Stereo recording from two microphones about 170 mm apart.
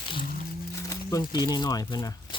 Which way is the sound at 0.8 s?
20° left (ahead or behind).